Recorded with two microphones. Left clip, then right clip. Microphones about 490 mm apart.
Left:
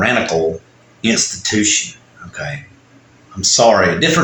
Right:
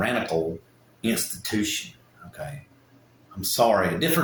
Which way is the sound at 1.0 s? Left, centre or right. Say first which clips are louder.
Left 12 dB; right.